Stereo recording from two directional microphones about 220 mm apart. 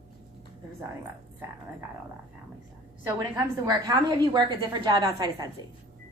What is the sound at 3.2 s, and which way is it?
A woman's voice, 15° right (ahead or behind).